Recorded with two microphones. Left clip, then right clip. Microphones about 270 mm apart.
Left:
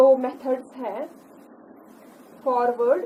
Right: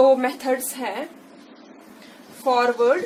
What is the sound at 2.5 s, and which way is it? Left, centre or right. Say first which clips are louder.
Speech: right 2 dB; right.